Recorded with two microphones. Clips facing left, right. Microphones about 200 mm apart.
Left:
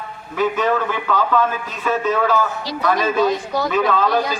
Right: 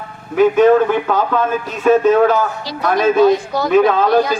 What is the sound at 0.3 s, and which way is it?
Speech, 50° right (ahead or behind).